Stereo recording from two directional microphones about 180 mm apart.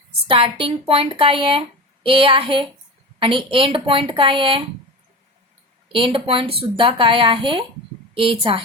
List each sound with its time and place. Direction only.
0.3 s speech: 30° right (ahead or behind)
5.9 s speech: 30° right (ahead or behind)